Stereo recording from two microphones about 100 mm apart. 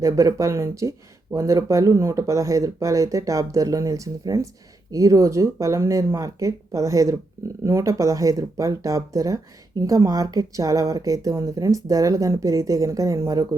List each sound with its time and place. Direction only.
0.0 s speech: 30° right (ahead or behind)